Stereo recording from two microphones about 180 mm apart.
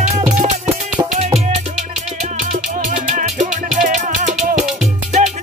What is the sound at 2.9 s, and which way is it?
Music, 45° right (ahead or behind).